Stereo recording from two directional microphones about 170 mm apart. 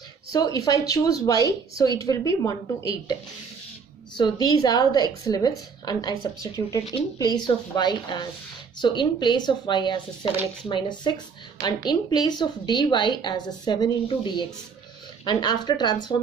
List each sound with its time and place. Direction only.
0.3 s a woman's voice: 20° left (ahead or behind)
4.2 s a woman's voice: 25° left (ahead or behind)